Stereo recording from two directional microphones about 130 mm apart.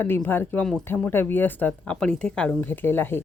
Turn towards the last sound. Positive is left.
turn(degrees=15)  # may be behind; listen again after turning